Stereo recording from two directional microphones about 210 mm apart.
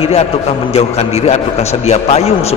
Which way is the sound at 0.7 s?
30° left (ahead or behind).